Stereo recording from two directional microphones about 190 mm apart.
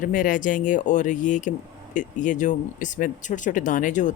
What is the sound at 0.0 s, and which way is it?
Speech, 45° left (ahead or behind).